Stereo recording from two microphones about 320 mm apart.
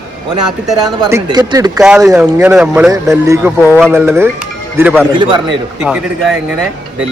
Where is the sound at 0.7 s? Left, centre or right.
Centre.